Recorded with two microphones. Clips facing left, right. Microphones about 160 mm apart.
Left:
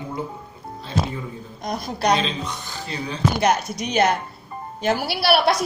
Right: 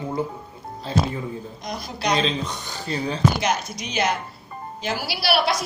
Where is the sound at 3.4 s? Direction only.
55° left (ahead or behind).